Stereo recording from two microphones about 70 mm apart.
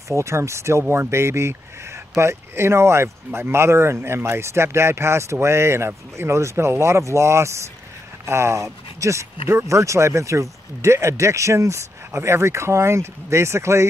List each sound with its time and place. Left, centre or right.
0.1 s speech: right